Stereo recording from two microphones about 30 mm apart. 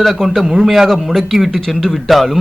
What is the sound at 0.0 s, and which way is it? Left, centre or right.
Speech, centre.